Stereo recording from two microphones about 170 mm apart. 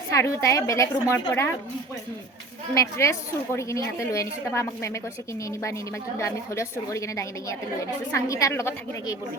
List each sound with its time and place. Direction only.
0.1 s a woman's voice: 15° left (ahead or behind)
2.7 s a woman's voice: 15° left (ahead or behind)